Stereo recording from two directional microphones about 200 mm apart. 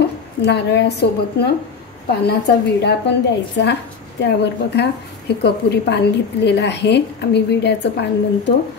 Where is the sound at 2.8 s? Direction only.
60° left (ahead or behind).